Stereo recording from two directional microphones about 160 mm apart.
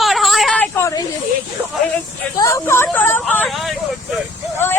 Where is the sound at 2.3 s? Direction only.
20° left (ahead or behind); by 4.2 s centre (ahead or behind).